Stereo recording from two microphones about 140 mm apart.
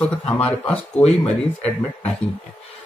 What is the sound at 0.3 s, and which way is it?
Speech, 10° left (ahead or behind).